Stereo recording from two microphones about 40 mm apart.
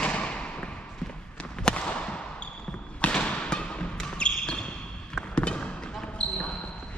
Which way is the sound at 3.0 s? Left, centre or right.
Left.